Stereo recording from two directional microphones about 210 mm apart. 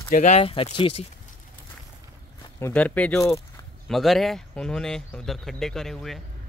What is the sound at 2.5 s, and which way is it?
Speech, 10° left (ahead or behind).